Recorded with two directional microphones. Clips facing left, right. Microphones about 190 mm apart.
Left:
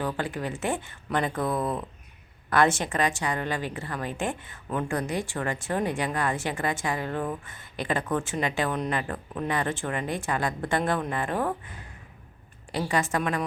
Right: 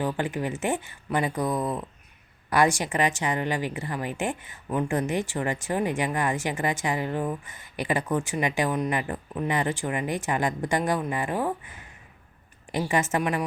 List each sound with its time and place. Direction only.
0.0 s a woman's voice: 20° right (ahead or behind)
12.7 s a woman's voice: 20° right (ahead or behind)